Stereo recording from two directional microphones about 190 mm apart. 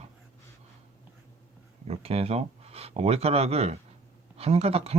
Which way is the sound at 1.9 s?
30° right (ahead or behind).